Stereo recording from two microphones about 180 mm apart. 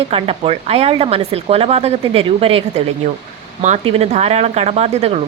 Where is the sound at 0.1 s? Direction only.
30° right (ahead or behind).